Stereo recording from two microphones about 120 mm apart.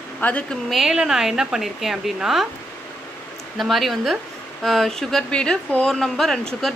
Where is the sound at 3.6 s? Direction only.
Centre (ahead or behind).